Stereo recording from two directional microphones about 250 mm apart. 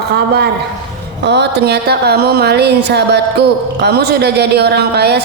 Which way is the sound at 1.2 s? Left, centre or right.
Right.